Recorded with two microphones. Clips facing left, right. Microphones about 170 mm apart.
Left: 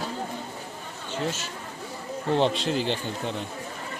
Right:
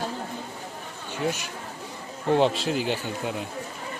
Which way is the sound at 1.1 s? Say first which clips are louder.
Right 2 dB; 15° right (ahead or behind).